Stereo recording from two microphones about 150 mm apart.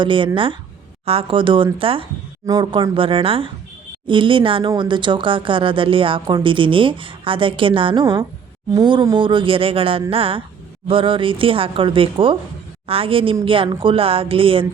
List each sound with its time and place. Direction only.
0.0 s a woman's voice: 35° right (ahead or behind)